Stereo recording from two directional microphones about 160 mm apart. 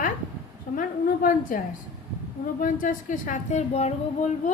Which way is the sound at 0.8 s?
60° left (ahead or behind).